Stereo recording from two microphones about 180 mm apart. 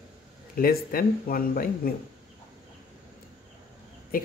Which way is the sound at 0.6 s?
55° left (ahead or behind).